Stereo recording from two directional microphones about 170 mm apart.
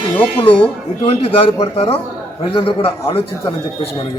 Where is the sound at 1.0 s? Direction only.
35° left (ahead or behind).